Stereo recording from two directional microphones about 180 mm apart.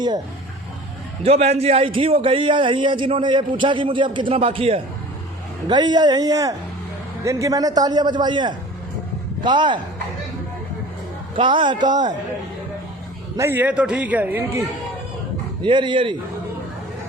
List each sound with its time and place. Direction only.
1.2 s a man's voice: 35° right (ahead or behind)
11.3 s a man's voice: 25° right (ahead or behind)
13.3 s a man's voice: 15° right (ahead or behind)
15.6 s a man's voice: 25° right (ahead or behind)